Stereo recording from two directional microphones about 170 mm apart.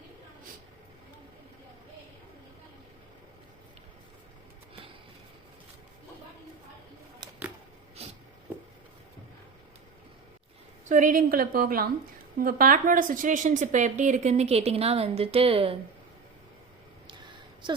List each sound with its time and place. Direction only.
10.8 s a woman's voice: 50° right (ahead or behind)
17.6 s a woman's voice: 25° right (ahead or behind)